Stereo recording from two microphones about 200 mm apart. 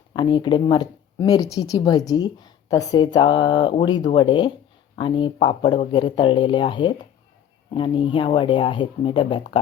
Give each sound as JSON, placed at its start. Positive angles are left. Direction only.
{"t": 0.1, "sound": "a woman's voice", "side_deg": 20}